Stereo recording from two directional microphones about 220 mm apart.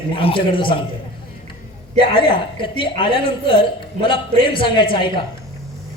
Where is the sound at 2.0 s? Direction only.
20° left (ahead or behind).